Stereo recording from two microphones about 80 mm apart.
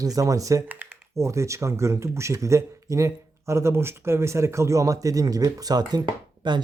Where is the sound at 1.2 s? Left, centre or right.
Right.